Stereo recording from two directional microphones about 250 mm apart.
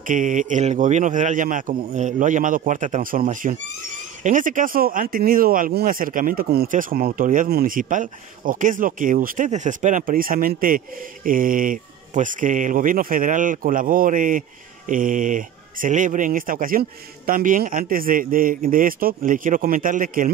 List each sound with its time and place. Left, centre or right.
0.0 s speech: right